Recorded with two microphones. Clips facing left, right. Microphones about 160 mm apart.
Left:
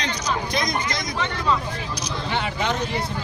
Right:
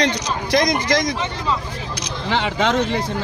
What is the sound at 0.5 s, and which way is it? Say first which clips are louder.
Speech: right 8 dB; 80° right.